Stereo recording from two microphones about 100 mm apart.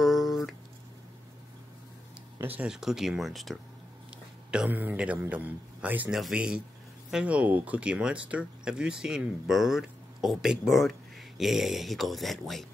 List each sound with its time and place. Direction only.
0.0 s a sound: centre (ahead or behind)
2.6 s speech: 5° right (ahead or behind)
4.5 s a man's voice: 15° right (ahead or behind)